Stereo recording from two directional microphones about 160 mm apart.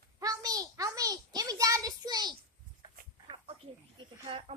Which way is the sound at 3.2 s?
35° right (ahead or behind).